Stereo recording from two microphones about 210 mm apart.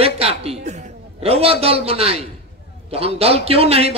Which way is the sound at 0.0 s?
30° right (ahead or behind).